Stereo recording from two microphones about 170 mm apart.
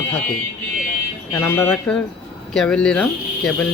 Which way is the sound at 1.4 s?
15° left (ahead or behind).